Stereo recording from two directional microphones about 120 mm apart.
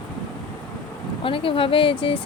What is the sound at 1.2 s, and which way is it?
Speech, 45° left (ahead or behind).